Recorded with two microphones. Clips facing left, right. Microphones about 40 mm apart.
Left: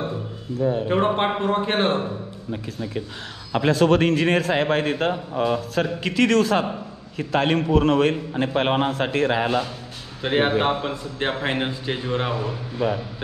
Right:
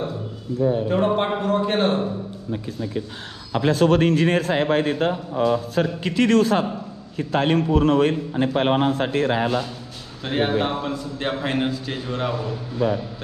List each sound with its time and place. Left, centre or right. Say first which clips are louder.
0.8 s a man's voice: even; left
3.5 s a man's voice: even; left
5.8 s a man's voice: even; left
10.2 s a man's voice: left 2 dB; left